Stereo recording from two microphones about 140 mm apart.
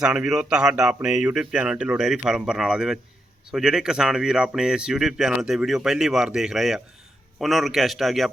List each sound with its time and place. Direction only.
0.0 s speech: 5° right (ahead or behind)